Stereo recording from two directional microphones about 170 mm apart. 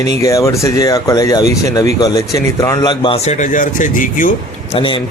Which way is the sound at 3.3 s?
50° left (ahead or behind).